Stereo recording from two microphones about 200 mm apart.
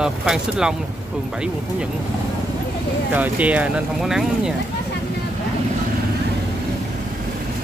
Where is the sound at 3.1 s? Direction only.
5° right (ahead or behind).